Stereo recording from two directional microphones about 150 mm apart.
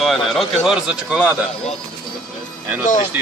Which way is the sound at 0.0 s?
Centre (ahead or behind).